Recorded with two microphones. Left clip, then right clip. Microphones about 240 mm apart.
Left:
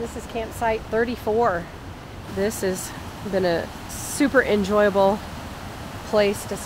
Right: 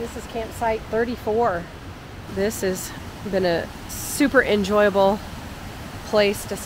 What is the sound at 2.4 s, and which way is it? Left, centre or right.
Speech, centre.